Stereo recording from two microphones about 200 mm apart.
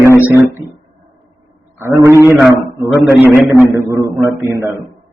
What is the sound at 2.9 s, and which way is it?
Speech, centre (ahead or behind).